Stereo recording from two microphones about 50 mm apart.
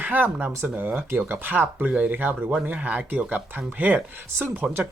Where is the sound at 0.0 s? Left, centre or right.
Right.